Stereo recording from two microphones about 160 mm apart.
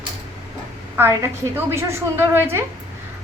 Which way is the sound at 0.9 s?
15° right (ahead or behind).